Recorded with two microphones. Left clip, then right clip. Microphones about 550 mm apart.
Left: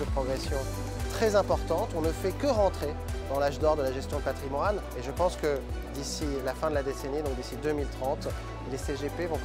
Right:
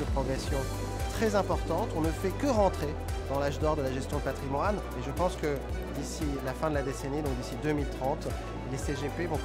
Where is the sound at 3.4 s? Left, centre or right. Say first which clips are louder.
Left 5 dB; right.